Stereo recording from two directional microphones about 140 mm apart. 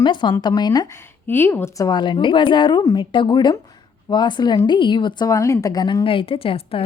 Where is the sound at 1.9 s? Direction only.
35° left (ahead or behind).